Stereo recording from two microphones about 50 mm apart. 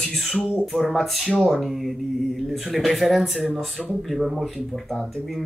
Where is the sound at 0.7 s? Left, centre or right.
Centre.